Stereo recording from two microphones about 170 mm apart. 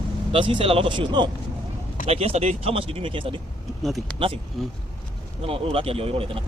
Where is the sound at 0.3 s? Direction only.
30° right (ahead or behind).